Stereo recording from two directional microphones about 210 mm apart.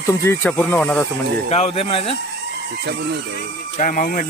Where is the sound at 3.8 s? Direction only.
40° left (ahead or behind).